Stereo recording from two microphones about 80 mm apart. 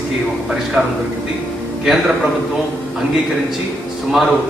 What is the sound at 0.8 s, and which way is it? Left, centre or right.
Speech, right.